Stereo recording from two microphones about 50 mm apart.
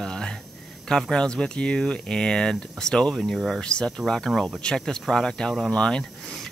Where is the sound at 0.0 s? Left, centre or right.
Centre.